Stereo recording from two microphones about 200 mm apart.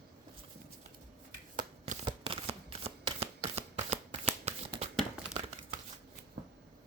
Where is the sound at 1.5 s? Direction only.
40° right (ahead or behind).